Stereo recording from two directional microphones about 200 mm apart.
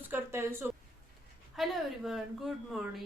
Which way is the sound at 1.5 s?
Centre (ahead or behind).